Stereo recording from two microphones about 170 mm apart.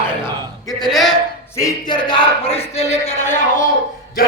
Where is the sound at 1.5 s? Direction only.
20° left (ahead or behind); by 3.4 s 45° left (ahead or behind).